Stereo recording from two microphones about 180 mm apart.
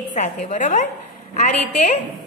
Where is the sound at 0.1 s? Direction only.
40° left (ahead or behind).